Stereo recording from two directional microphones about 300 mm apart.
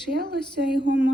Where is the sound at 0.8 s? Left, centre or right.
Right.